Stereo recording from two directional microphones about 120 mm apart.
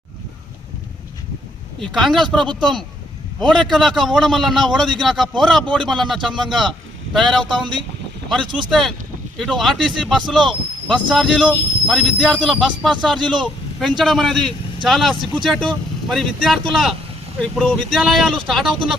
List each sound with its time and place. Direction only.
1.8 s speech: 5° left (ahead or behind)
2.5 s speech: 40° right (ahead or behind)
3.6 s a man's voice: centre (ahead or behind)
8.7 s speech: centre (ahead or behind)